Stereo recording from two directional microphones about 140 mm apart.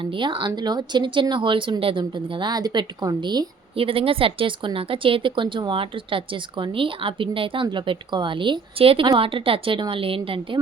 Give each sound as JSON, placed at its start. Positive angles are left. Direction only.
{"t": 0.0, "sound": "speech", "side_deg": -35}